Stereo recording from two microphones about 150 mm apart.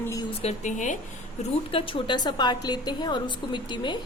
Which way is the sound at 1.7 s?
35° left (ahead or behind).